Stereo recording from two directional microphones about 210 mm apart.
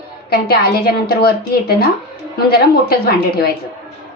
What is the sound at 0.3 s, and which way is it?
A woman's voice, 50° left (ahead or behind).